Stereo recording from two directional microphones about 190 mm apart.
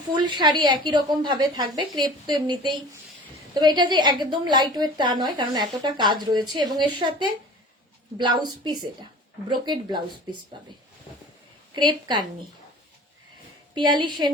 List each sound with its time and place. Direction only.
0.1 s a woman's voice: 25° right (ahead or behind)
11.7 s a woman's voice: 25° right (ahead or behind)
13.7 s a woman's voice: 25° right (ahead or behind)